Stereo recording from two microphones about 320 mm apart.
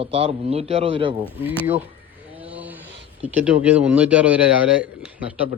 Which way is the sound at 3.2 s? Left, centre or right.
Centre.